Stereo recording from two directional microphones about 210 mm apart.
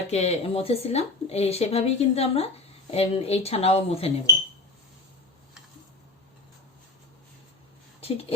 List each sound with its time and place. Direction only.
0.1 s speech: 30° left (ahead or behind)
8.0 s speech: 30° left (ahead or behind)